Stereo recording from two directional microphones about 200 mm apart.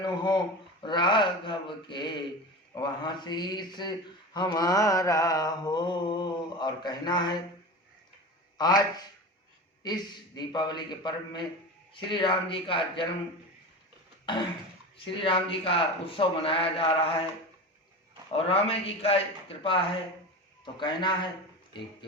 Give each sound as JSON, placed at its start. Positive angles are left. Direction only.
{"t": 0.0, "sound": "mantra", "side_deg": 20}
{"t": 8.5, "sound": "mantra", "side_deg": 20}
{"t": 14.3, "sound": "mantra", "side_deg": 25}
{"t": 18.3, "sound": "mantra", "side_deg": 30}